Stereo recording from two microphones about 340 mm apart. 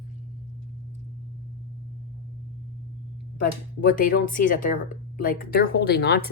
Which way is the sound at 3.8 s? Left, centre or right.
Left.